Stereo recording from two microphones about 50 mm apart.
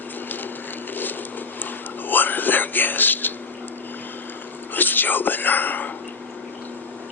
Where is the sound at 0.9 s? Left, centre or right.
Left.